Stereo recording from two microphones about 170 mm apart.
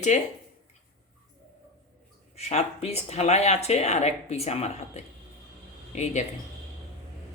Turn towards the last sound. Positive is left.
turn(degrees=40)  # may be behind; listen again after turning